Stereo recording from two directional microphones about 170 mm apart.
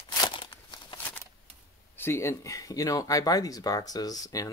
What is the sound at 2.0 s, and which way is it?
Speech, 15° left (ahead or behind).